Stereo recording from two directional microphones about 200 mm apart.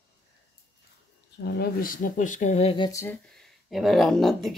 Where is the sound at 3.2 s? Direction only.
Centre (ahead or behind).